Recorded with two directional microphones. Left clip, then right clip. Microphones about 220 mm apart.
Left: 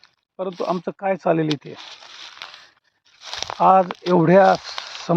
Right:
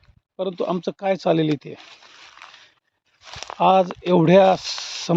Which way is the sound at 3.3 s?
40° left (ahead or behind).